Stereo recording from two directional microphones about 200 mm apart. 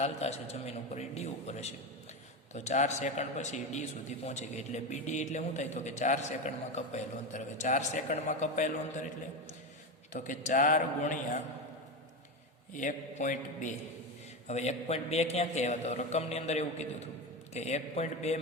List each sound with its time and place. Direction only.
0.0 s a man's voice: 30° left (ahead or behind)
10.1 s a man's voice: 40° left (ahead or behind)
12.7 s a man's voice: 40° left (ahead or behind)